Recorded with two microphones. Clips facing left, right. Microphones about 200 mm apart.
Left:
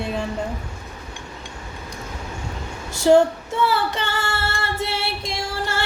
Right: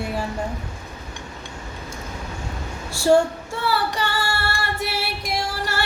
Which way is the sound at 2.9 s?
20° left (ahead or behind).